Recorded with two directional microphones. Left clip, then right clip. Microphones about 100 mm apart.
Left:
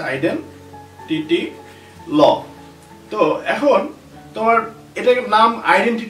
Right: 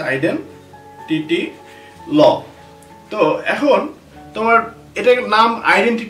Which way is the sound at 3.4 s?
20° right (ahead or behind).